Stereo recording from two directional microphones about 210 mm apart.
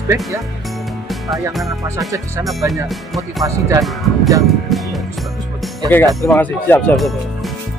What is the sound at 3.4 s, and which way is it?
Speech, 15° right (ahead or behind).